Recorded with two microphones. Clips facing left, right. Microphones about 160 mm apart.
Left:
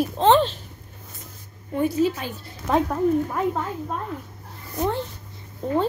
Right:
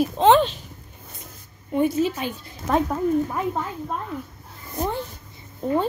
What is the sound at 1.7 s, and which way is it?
Speech, 25° right (ahead or behind).